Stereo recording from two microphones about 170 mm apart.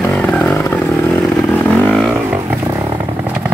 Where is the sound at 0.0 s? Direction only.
10° left (ahead or behind).